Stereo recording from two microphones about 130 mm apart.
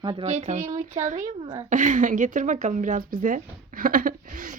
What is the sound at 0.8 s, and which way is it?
A woman's voice, 75° right (ahead or behind).